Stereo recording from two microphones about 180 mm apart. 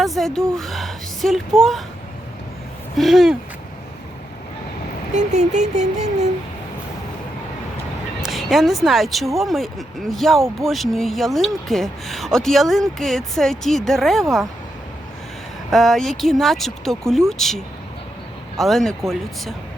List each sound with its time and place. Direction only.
0.0 s speech: centre (ahead or behind)
3.0 s speech: centre (ahead or behind)
5.1 s vehicle: 40° right (ahead or behind)
8.2 s speech: centre (ahead or behind)
15.7 s speech: centre (ahead or behind)